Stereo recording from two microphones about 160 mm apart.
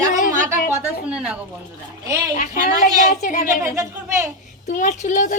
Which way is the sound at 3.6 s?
15° right (ahead or behind).